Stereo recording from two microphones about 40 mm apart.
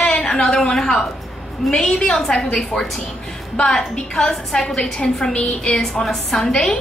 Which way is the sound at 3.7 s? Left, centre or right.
Centre.